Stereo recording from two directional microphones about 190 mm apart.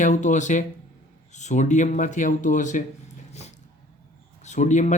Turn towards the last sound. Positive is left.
turn(degrees=40)  # may be behind; listen again after turning